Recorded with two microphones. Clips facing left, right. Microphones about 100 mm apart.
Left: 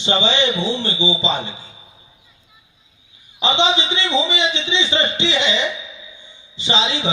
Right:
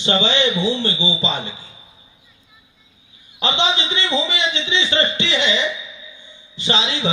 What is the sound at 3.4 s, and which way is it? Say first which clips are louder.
A man's voice: left 3 dB; 20° left (ahead or behind).